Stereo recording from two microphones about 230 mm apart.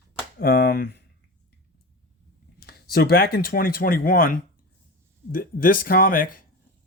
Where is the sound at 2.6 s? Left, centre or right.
Left.